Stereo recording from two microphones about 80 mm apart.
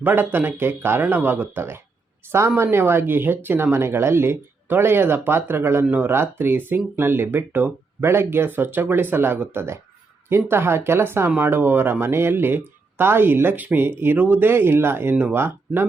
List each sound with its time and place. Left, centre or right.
0.0 s speech: right